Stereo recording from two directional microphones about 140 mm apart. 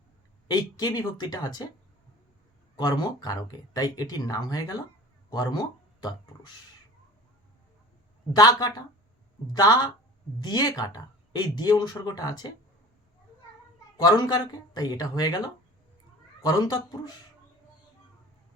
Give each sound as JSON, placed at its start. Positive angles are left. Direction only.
{"t": 0.4, "sound": "speech", "side_deg": 30}
{"t": 2.7, "sound": "speech", "side_deg": 30}
{"t": 8.3, "sound": "speech", "side_deg": 25}
{"t": 13.9, "sound": "speech", "side_deg": 30}